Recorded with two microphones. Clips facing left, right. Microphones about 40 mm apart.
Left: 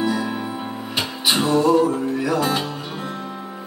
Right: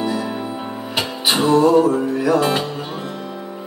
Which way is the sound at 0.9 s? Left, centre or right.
Centre.